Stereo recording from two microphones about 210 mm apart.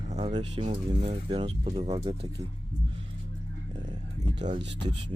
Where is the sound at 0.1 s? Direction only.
30° right (ahead or behind).